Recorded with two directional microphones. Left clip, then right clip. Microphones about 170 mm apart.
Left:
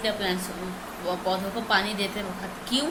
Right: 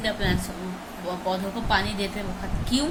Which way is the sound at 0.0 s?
15° right (ahead or behind).